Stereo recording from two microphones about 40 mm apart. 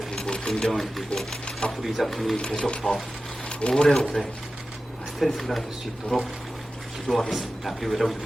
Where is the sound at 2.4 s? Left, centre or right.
Left.